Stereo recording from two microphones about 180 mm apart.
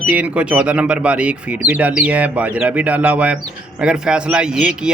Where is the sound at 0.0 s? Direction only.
10° right (ahead or behind).